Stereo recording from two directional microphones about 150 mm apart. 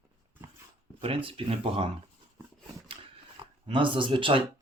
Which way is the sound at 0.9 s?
35° right (ahead or behind).